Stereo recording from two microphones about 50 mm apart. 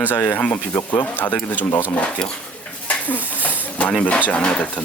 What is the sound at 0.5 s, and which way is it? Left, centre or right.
Speech, left.